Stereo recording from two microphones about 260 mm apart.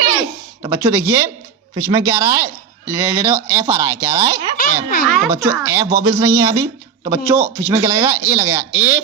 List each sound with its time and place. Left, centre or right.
0.6 s speech: centre
4.6 s a child's voice: left
5.0 s speech: centre